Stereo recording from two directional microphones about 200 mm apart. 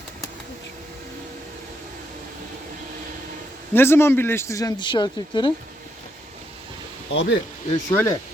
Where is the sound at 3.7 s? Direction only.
10° left (ahead or behind).